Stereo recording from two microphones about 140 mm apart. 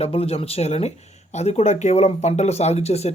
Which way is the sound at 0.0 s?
45° left (ahead or behind).